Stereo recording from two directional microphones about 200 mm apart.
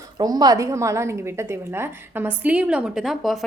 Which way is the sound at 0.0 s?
20° right (ahead or behind).